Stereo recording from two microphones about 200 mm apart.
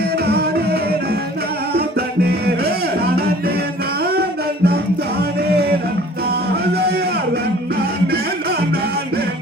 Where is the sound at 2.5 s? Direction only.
50° right (ahead or behind).